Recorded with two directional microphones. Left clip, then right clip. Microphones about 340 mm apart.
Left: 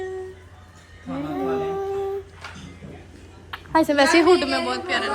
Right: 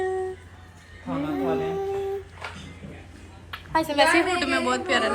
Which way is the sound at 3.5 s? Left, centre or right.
Left.